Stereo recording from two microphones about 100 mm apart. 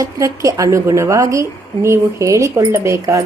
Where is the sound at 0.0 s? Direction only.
35° right (ahead or behind).